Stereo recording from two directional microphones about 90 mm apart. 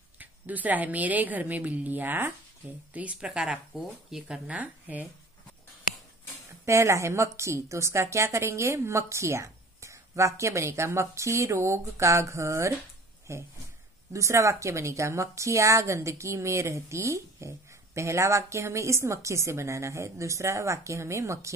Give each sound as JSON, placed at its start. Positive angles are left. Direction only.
{"t": 0.2, "sound": "a woman's voice", "side_deg": -20}
{"t": 6.6, "sound": "a woman's voice", "side_deg": -35}